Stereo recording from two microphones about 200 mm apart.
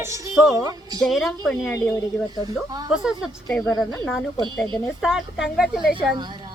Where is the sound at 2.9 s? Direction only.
5° right (ahead or behind).